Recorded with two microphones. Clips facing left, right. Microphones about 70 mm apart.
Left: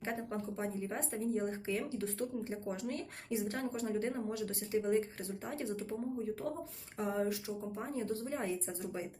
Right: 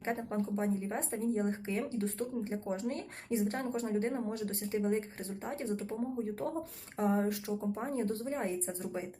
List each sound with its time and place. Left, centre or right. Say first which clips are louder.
0.0 s speech: right 4 dB; right
7.0 s speech: right 4 dB; right